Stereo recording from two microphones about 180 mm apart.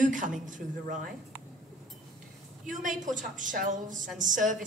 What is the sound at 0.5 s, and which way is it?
Speech, 45° right (ahead or behind).